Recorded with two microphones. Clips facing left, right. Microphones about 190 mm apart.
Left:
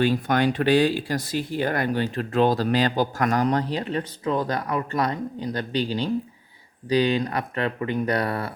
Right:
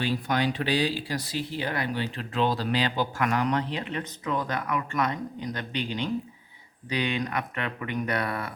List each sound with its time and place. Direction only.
0.0 s speech: 50° left (ahead or behind); by 8.5 s 35° left (ahead or behind)